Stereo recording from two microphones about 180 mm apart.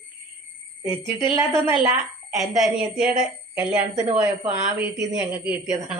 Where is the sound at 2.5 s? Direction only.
Centre (ahead or behind).